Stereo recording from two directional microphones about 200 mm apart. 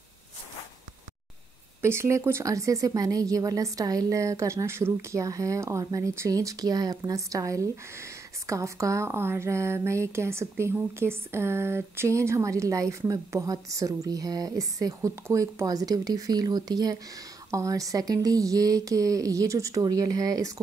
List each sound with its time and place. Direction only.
1.8 s speech: 15° right (ahead or behind)